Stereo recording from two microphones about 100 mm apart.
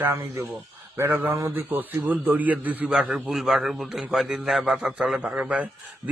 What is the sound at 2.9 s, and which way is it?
A man's voice, 5° right (ahead or behind).